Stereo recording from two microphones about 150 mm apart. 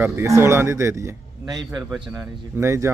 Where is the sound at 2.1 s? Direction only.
15° right (ahead or behind).